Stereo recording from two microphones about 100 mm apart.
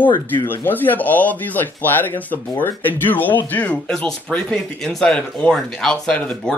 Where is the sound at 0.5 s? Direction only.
20° left (ahead or behind).